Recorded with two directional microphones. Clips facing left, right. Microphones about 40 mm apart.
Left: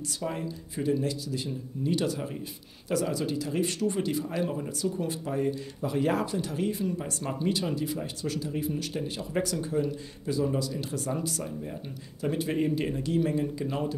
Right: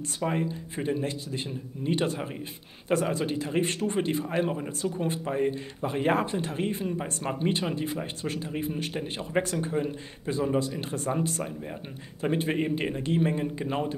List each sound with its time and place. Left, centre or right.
0.2 s speech: right